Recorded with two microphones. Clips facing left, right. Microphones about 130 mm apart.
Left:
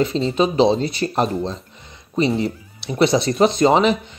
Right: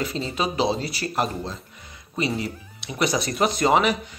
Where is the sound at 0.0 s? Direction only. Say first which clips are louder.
Left 8 dB; 25° left (ahead or behind).